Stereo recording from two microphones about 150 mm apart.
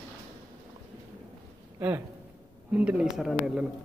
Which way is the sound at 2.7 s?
5° right (ahead or behind).